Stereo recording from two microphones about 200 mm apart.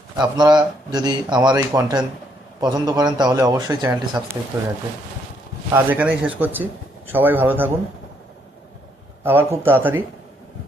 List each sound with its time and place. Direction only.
0.2 s a man's voice: 20° right (ahead or behind)
5.7 s speech: 10° right (ahead or behind)
9.2 s speech: 10° right (ahead or behind)